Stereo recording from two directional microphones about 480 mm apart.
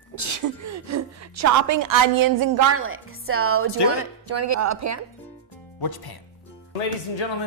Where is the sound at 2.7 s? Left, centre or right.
Right.